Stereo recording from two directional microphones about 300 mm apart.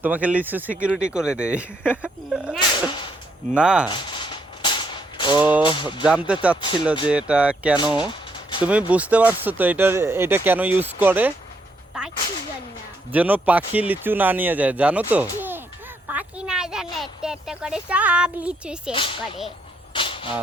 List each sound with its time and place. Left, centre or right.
0.0 s speech: centre
3.8 s a sound: centre
5.6 s speech: centre
6.1 s speech: centre
6.6 s speech: centre
7.1 s speech: centre
7.8 s a sound: centre
8.9 s speech: centre
11.9 s whip: centre
13.1 s speech: centre
16.0 s a sound: centre
18.9 s speech: centre
19.5 s a sound: centre